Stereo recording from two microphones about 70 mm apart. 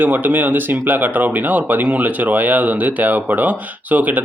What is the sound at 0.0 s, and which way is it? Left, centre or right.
Speech, right.